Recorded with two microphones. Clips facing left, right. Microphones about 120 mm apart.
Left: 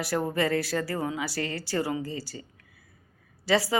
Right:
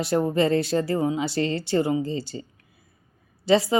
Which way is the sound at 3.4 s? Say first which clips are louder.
Right 5 dB; 25° right (ahead or behind).